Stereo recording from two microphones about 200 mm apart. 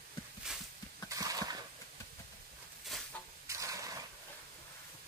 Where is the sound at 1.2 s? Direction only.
20° right (ahead or behind).